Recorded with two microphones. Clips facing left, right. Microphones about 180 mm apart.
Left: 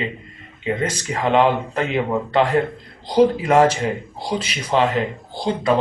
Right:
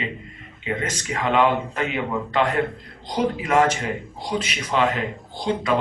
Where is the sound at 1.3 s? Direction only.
35° left (ahead or behind).